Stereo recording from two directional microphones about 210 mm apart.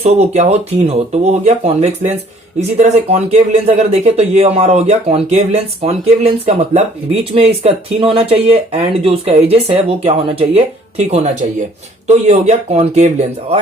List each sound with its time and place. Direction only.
0.0 s speech: 30° right (ahead or behind)